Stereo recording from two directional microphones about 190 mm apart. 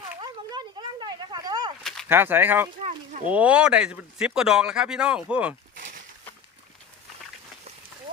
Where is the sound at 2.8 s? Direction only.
40° right (ahead or behind).